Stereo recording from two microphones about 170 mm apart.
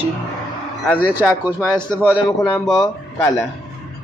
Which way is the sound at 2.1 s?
5° left (ahead or behind).